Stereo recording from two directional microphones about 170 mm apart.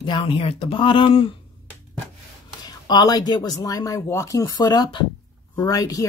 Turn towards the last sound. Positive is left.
turn(degrees=20)  # may be behind; listen again after turning